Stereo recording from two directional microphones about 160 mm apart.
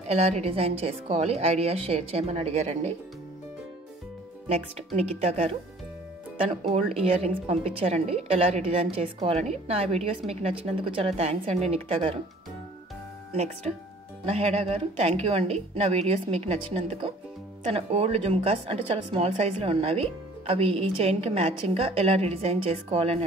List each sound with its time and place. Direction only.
0.0 s speech: 40° right (ahead or behind)
4.7 s speech: 40° right (ahead or behind)
13.3 s speech: 45° right (ahead or behind)